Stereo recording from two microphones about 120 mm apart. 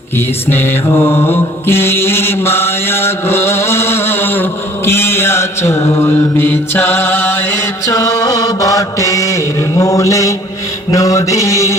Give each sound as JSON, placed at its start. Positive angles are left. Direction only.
{"t": 0.5, "sound": "mantra", "side_deg": 20}
{"t": 7.9, "sound": "mantra", "side_deg": 30}